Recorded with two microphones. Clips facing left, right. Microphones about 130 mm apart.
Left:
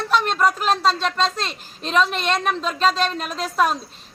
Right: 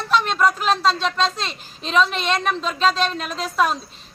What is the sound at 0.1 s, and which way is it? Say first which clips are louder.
A woman's voice: right 1 dB; 5° left (ahead or behind).